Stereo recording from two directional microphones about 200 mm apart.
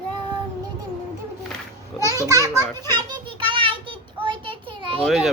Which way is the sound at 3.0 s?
25° right (ahead or behind).